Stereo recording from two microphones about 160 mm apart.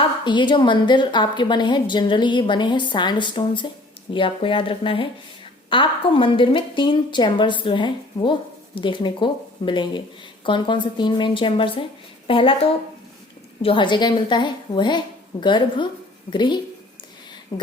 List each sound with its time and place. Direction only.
0.0 s a woman's voice: 30° left (ahead or behind)